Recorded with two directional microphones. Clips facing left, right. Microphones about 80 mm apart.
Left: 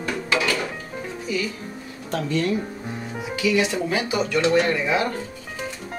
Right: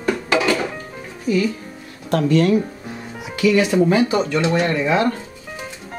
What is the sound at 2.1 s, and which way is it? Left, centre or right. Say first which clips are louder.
Speech: right 7 dB; right.